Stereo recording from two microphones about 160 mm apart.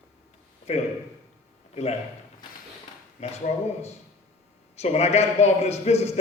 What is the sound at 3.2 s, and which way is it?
Speech, 40° left (ahead or behind).